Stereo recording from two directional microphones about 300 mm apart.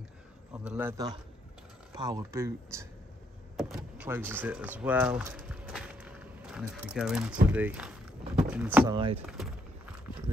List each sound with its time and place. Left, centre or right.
0.7 s speech: centre
3.5 s vehicle: centre
7.4 s speech: centre
8.9 s speech: centre